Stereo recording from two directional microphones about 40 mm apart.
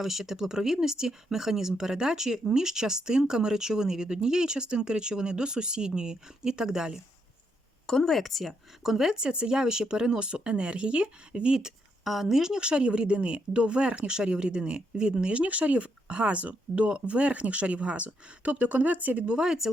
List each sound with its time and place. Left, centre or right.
0.0 s speech: centre
7.9 s speech: centre
8.1 s speech: centre
12.0 s speech: centre; by 19.4 s right
19.4 s speech: centre